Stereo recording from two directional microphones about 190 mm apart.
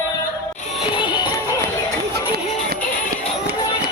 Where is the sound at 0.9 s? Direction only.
25° left (ahead or behind).